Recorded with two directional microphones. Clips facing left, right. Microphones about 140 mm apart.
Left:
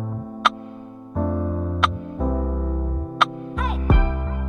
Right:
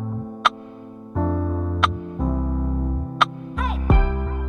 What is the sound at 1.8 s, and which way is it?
Music, centre (ahead or behind).